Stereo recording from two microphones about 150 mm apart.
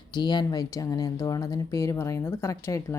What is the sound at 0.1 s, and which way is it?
Speech, 30° left (ahead or behind).